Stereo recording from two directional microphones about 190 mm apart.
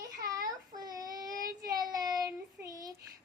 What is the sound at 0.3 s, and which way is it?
Child singing, 20° right (ahead or behind).